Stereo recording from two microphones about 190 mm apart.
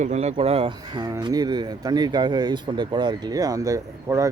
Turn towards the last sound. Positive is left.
turn(degrees=-15)  # may be behind; listen again after turning